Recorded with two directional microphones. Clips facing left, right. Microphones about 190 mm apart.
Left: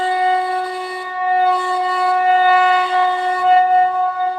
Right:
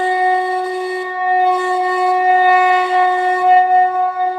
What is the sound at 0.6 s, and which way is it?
Shofar, 20° right (ahead or behind).